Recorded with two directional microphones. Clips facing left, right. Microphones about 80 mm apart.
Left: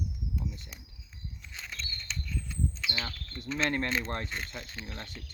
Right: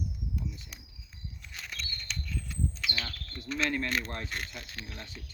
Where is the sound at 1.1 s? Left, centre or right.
Centre.